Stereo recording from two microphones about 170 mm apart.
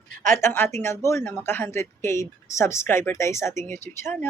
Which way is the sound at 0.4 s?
15° left (ahead or behind).